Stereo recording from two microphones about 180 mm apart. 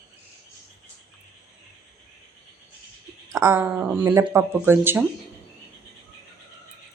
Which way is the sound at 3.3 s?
15° right (ahead or behind).